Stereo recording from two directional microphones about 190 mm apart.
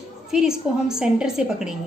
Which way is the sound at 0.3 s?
5° right (ahead or behind).